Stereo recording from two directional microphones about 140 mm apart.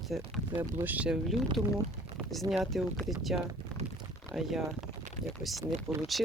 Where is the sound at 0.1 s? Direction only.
Centre (ahead or behind).